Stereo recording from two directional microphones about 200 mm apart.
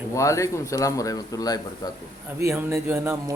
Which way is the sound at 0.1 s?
15° left (ahead or behind).